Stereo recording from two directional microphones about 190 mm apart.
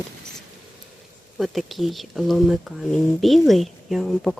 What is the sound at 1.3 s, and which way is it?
Speech, centre (ahead or behind).